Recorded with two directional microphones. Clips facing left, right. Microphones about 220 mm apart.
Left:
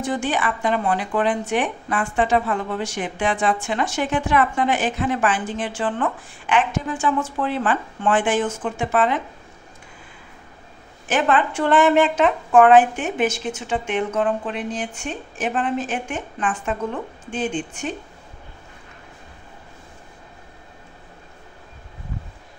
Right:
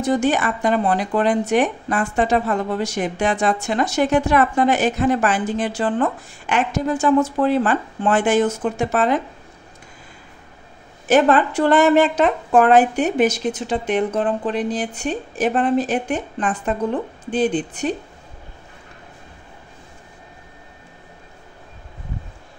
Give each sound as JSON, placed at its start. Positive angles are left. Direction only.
{"t": 0.0, "sound": "speech", "side_deg": -40}
{"t": 11.1, "sound": "speech", "side_deg": -40}